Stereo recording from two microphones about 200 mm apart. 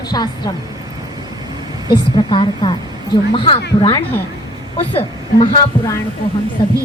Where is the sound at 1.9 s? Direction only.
25° left (ahead or behind).